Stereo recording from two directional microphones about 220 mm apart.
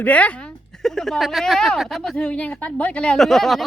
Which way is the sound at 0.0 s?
5° left (ahead or behind).